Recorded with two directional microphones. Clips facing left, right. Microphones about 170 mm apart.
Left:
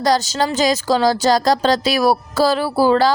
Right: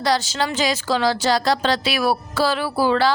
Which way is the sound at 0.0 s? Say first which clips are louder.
Left 4 dB; 40° left (ahead or behind).